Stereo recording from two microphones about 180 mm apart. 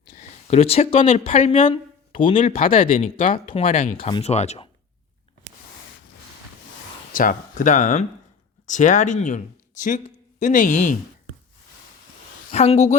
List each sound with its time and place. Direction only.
0.4 s speech: 35° left (ahead or behind)
2.7 s speech: 50° left (ahead or behind)
3.5 s speech: 30° left (ahead or behind)
3.8 s speech: 45° left (ahead or behind)
4.1 s speech: 35° left (ahead or behind)
7.1 s speech: 50° left (ahead or behind)
12.5 s a woman's voice: 35° left (ahead or behind)